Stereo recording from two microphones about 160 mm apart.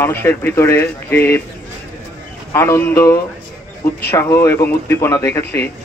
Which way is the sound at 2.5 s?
15° left (ahead or behind).